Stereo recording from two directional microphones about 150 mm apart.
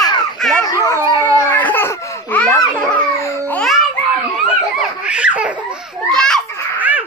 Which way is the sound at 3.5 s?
Centre (ahead or behind).